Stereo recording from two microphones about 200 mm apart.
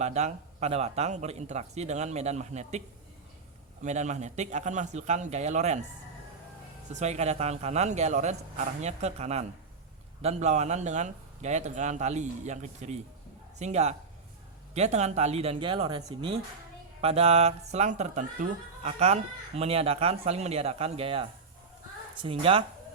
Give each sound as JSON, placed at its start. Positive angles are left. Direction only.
{"t": 0.0, "sound": "speech", "side_deg": -35}
{"t": 3.8, "sound": "speech", "side_deg": -35}
{"t": 6.9, "sound": "speech", "side_deg": -35}